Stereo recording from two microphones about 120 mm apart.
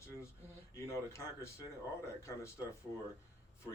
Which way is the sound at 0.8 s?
25° left (ahead or behind).